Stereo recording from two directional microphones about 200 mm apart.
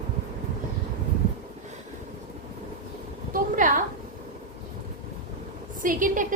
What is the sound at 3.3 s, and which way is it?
Speech, 40° right (ahead or behind).